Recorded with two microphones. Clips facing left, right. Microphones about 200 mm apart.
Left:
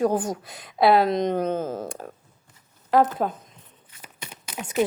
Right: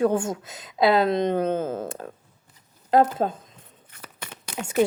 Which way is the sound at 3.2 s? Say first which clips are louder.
Right 1 dB; 35° right (ahead or behind).